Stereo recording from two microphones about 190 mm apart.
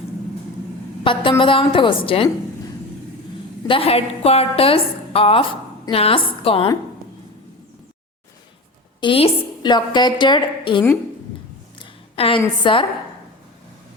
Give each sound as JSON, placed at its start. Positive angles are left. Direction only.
{"t": 1.0, "sound": "a woman's voice", "side_deg": 25}
{"t": 3.7, "sound": "a woman's voice", "side_deg": 30}
{"t": 9.0, "sound": "a woman's voice", "side_deg": 30}
{"t": 12.1, "sound": "a woman's voice", "side_deg": 30}